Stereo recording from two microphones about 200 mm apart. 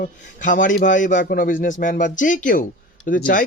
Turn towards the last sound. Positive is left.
turn(degrees=45)  # may be behind; listen again after turning